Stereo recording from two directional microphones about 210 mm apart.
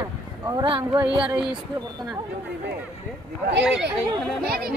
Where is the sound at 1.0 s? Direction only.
25° right (ahead or behind).